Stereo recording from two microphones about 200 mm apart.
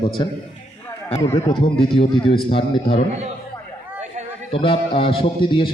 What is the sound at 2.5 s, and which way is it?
Speech, 30° left (ahead or behind).